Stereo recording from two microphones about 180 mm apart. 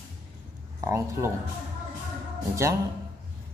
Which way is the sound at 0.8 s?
15° right (ahead or behind).